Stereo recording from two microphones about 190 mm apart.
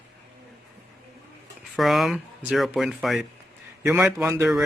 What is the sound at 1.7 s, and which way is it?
Speech, centre (ahead or behind).